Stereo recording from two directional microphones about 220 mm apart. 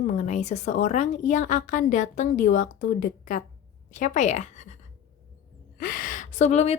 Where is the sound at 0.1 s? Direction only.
30° left (ahead or behind).